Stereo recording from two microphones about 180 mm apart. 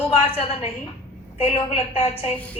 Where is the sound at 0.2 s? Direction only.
30° left (ahead or behind).